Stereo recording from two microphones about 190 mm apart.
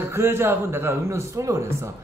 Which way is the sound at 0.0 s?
15° right (ahead or behind).